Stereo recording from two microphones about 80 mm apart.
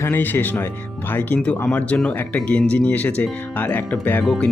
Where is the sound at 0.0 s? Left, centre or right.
Left.